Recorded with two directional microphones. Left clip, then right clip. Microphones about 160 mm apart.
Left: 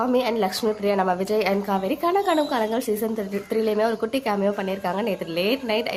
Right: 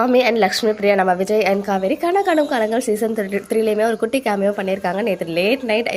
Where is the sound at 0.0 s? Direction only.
20° right (ahead or behind).